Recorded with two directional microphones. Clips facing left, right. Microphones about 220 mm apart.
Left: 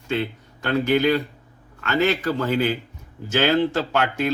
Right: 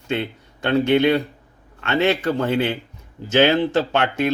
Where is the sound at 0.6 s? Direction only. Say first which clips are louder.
Right 3 dB; 25° right (ahead or behind).